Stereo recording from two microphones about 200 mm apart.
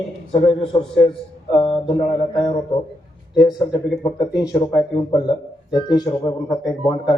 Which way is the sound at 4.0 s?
20° left (ahead or behind).